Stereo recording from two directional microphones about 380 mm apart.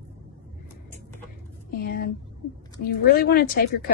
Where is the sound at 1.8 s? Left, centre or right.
Left.